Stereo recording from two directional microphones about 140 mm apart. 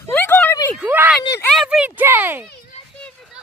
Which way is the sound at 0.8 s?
10° right (ahead or behind).